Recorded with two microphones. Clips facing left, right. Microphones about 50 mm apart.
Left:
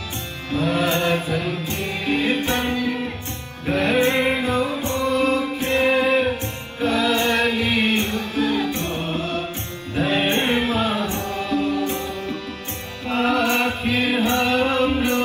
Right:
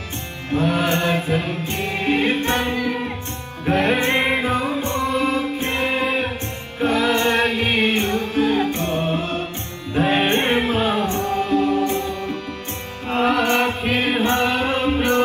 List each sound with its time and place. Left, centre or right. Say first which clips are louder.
0.5 s music: right 1 dB; right
3.7 s music: even; right
6.9 s music: right 1 dB; right
9.9 s music: right 2 dB; right
13.3 s music: right 1 dB; right